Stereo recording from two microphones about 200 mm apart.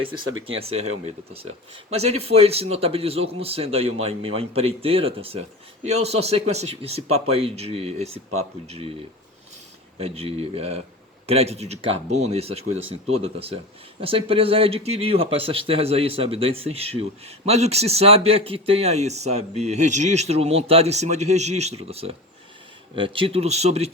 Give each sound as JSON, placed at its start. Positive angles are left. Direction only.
{"t": 0.0, "sound": "speech", "side_deg": -85}
{"t": 0.5, "sound": "speech", "side_deg": -30}
{"t": 10.0, "sound": "speech", "side_deg": -30}